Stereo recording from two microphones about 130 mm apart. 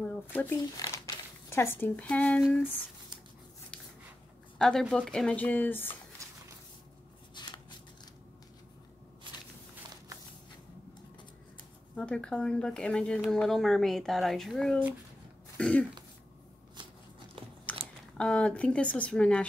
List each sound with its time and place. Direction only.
0.0 s speech: 10° left (ahead or behind)
0.7 s speech: 25° left (ahead or behind); by 2.4 s 10° left (ahead or behind)
4.6 s speech: 5° left (ahead or behind)
6.2 s a sound: 25° right (ahead or behind)
7.3 s a sound: 35° left (ahead or behind)
11.9 s speech: 5° left (ahead or behind)
15.5 s throat clearing: 10° left (ahead or behind)
17.4 s biting: 45° right (ahead or behind)
18.1 s speech: 5° left (ahead or behind)